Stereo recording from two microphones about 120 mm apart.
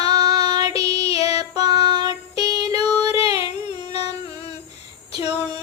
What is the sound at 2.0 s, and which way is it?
Music, 35° right (ahead or behind).